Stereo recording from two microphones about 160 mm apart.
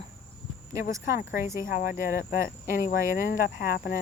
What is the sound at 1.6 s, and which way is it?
Speech, 65° left (ahead or behind).